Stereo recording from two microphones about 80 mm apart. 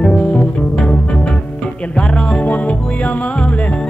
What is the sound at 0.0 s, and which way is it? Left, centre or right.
Music, centre.